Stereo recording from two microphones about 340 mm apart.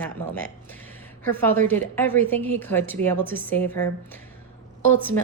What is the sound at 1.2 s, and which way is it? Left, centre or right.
A woman's voice, centre.